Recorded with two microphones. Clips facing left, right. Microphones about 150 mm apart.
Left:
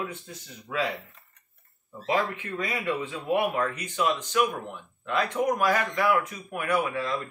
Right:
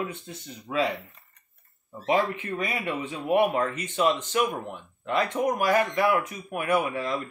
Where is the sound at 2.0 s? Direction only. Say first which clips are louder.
Right 3 dB; 20° right (ahead or behind).